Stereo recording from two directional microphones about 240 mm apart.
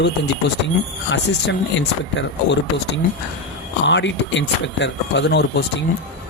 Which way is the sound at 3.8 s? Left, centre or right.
Left.